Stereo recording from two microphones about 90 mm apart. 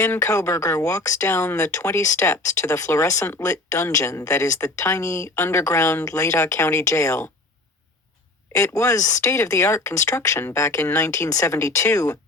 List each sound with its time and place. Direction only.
0.0 s speech: 35° left (ahead or behind)
8.5 s speech: 35° left (ahead or behind)